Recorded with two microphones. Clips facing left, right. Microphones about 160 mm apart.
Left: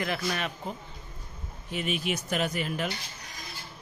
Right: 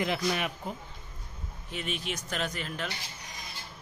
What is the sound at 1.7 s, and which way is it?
Speech, 5° left (ahead or behind).